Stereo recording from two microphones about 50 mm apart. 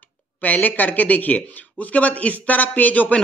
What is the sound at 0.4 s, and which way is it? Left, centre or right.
A man's voice, left.